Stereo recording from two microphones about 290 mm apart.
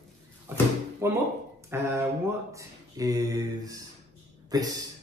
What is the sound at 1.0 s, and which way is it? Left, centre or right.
Speech, centre.